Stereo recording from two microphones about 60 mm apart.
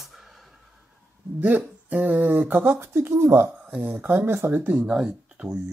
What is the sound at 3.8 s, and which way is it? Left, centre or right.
Speech, right.